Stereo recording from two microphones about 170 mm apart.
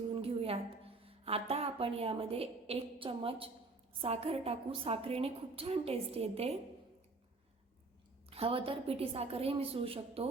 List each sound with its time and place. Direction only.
0.1 s a woman's voice: 35° right (ahead or behind)
8.3 s a woman's voice: 35° right (ahead or behind)